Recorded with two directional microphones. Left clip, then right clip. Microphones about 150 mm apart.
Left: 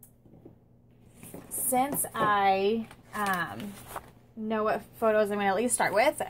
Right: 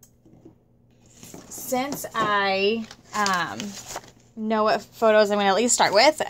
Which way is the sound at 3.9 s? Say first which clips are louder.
Right 2 dB; 40° right (ahead or behind).